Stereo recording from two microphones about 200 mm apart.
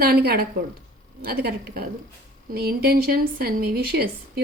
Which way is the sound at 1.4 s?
50° right (ahead or behind).